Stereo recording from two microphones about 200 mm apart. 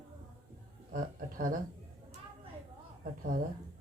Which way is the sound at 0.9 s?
40° right (ahead or behind).